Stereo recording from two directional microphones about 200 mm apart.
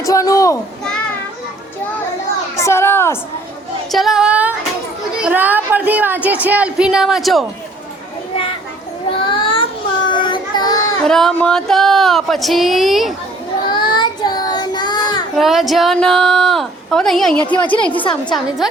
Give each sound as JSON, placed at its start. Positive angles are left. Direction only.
{"t": 0.0, "sound": "a child's voice", "side_deg": 15}
{"t": 2.6, "sound": "a sound", "side_deg": 15}
{"t": 3.9, "sound": "a woman's voice", "side_deg": 0}
{"t": 9.0, "sound": "child singing", "side_deg": 25}
{"t": 11.0, "sound": "speech", "side_deg": 0}
{"t": 13.7, "sound": "child singing", "side_deg": 25}
{"t": 15.4, "sound": "a child's voice", "side_deg": 0}